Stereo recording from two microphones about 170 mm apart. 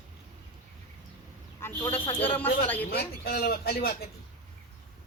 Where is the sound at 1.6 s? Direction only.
15° left (ahead or behind).